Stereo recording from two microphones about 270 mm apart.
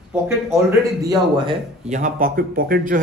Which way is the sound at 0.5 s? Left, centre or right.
Centre.